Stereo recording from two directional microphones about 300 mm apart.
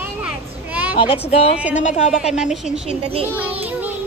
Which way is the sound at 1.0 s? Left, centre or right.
Centre.